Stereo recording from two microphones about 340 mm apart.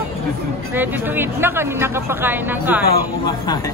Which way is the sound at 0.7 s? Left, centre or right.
Centre.